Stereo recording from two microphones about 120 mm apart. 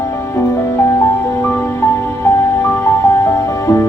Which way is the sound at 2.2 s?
20° left (ahead or behind).